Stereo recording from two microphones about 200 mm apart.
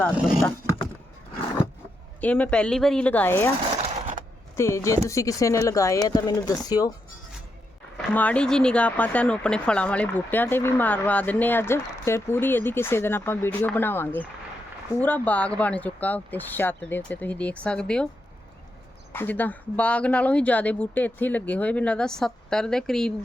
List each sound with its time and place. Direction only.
2.2 s speech: 5° left (ahead or behind)
3.8 s a sound: 35° right (ahead or behind)
4.5 s speech: 15° left (ahead or behind)
8.1 s speech: 5° left (ahead or behind)
19.1 s speech: 10° left (ahead or behind)